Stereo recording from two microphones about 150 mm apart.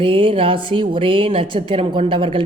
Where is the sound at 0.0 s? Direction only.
35° right (ahead or behind).